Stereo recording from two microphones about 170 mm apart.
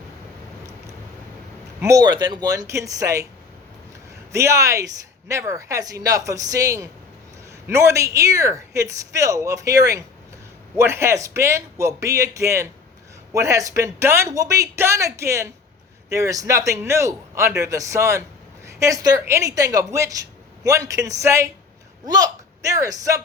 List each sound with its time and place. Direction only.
1.8 s speech: 20° right (ahead or behind)
4.3 s speech: 15° right (ahead or behind)